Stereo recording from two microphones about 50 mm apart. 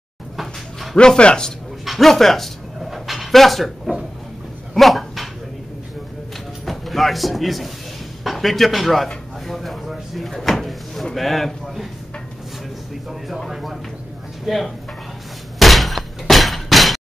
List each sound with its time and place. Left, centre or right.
0.9 s a man's voice: centre
1.9 s dog: centre
6.6 s speech: centre
9.5 s drawer open or close: centre
11.1 s a man's voice: centre
13.5 s a man's voice: centre
15.6 s a sound: centre